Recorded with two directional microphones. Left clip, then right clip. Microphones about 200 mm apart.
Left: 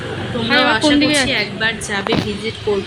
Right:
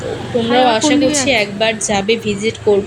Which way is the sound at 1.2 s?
5° right (ahead or behind).